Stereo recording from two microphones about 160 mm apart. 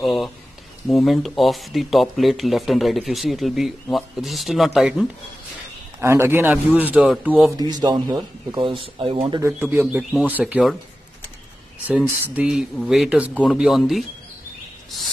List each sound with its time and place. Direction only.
0.0 s speech: centre (ahead or behind)
5.9 s speech: 15° right (ahead or behind)
7.8 s speech: 25° right (ahead or behind)
9.5 s speech: 10° right (ahead or behind)
11.9 s speech: 10° right (ahead or behind)